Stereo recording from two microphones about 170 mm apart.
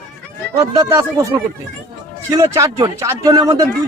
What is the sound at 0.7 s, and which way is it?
Speech, 20° right (ahead or behind).